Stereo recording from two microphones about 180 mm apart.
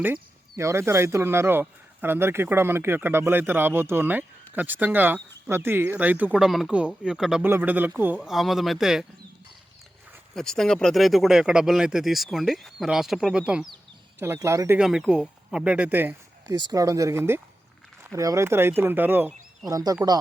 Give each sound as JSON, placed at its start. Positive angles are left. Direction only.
{"t": 0.0, "sound": "speech", "side_deg": -15}
{"t": 10.3, "sound": "speech", "side_deg": 5}
{"t": 14.8, "sound": "speech", "side_deg": -5}